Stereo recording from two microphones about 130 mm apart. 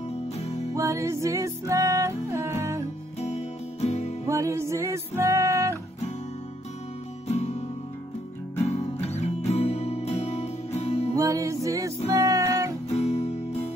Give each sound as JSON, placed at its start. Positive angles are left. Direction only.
{"t": 0.3, "sound": "music", "side_deg": 55}
{"t": 0.7, "sound": "music", "side_deg": -25}
{"t": 3.2, "sound": "music", "side_deg": 55}
{"t": 4.3, "sound": "music", "side_deg": -25}
{"t": 7.2, "sound": "music", "side_deg": 55}
{"t": 8.6, "sound": "music", "side_deg": 55}
{"t": 11.1, "sound": "music", "side_deg": -25}
{"t": 12.9, "sound": "guitar", "side_deg": 55}